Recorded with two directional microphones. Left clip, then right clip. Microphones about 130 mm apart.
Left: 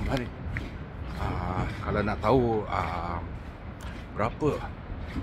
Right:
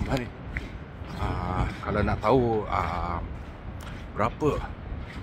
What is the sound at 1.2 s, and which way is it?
Speech, 10° right (ahead or behind).